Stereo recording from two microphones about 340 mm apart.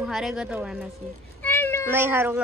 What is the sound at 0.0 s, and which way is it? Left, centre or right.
Speech, centre.